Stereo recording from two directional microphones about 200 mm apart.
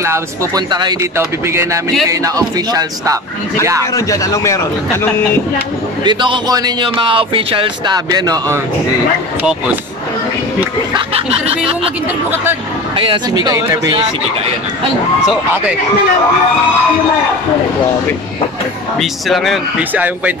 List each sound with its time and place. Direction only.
0.0 s speech: 15° right (ahead or behind)
3.9 s speech: 15° left (ahead or behind)
6.0 s speech: 25° right (ahead or behind)
9.4 s speech: 5° right (ahead or behind)
10.9 s speech: 30° right (ahead or behind)
12.9 s speech: 20° right (ahead or behind)
18.9 s speech: centre (ahead or behind)